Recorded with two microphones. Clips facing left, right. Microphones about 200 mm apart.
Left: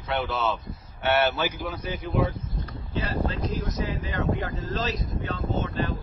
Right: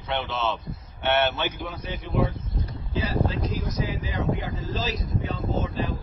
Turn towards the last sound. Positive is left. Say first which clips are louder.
# even
turn(degrees=0)  # may be behind; listen again after turning